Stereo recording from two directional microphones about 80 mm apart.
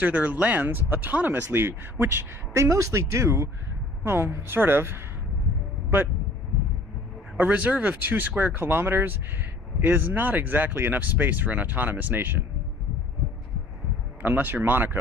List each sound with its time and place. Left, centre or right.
0.0 s speech: right
7.3 s speech: centre
14.2 s speech: right